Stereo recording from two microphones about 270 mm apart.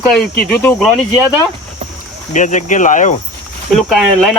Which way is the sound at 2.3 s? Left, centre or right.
Left.